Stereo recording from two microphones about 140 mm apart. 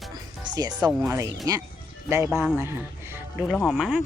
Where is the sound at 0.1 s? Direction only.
30° right (ahead or behind).